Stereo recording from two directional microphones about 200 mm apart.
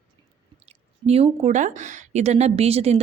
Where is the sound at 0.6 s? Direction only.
30° right (ahead or behind).